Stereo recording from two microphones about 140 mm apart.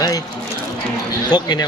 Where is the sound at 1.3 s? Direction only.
30° left (ahead or behind).